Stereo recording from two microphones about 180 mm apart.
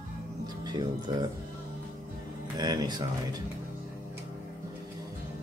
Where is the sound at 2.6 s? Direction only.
20° right (ahead or behind).